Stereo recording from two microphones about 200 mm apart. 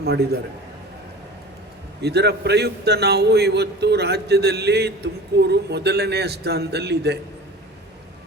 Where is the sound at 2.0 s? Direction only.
55° right (ahead or behind).